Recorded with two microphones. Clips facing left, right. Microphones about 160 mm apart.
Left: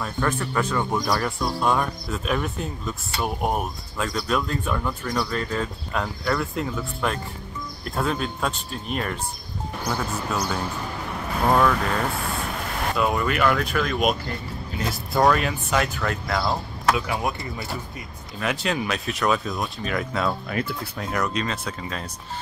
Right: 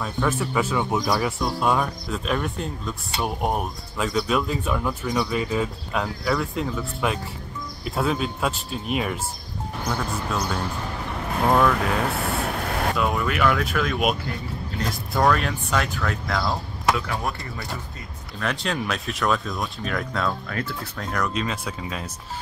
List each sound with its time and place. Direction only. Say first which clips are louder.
0.0 s speech: right 1 dB; 5° right (ahead or behind)
12.9 s speech: left 5 dB; centre (ahead or behind)
16.9 s speech: left 2 dB; 15° left (ahead or behind)
18.4 s speech: left 1 dB; 5° left (ahead or behind)